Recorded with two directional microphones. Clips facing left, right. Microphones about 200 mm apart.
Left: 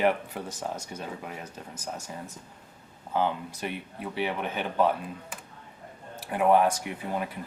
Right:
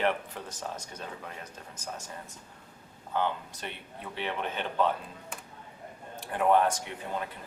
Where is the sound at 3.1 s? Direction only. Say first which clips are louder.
Left 3 dB; 10° left (ahead or behind).